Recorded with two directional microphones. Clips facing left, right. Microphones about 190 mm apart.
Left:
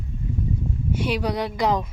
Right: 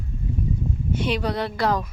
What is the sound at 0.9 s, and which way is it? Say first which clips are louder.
Speech: even; 10° left (ahead or behind).